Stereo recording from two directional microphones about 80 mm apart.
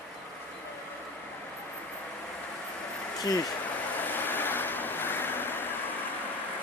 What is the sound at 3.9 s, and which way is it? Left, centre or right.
Vehicle, left.